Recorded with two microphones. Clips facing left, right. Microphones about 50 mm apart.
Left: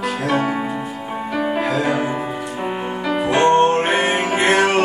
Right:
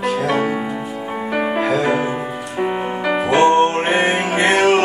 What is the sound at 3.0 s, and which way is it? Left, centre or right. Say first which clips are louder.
Music: right 1 dB; right.